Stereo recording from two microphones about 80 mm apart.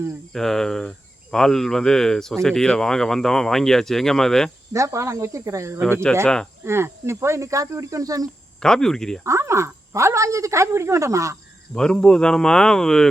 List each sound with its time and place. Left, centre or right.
0.3 s speech: centre
4.7 s speech: right
6.2 s speech: centre
6.7 s speech: right
8.6 s speech: centre
9.2 s speech: right
11.7 s speech: centre